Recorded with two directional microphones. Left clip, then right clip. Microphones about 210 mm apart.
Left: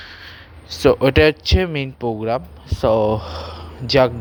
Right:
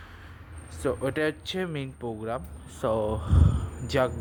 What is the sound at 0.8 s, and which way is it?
Speech, 35° left (ahead or behind).